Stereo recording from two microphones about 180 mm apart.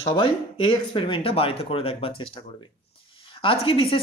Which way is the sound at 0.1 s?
30° left (ahead or behind).